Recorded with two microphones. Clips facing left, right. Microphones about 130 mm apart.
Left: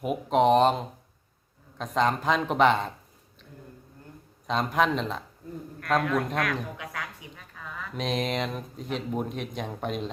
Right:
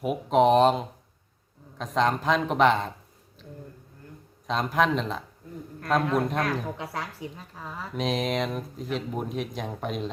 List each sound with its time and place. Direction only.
0.0 s speech: centre (ahead or behind)
4.4 s speech: centre (ahead or behind)
6.0 s speech: 30° right (ahead or behind)
7.9 s speech: centre (ahead or behind)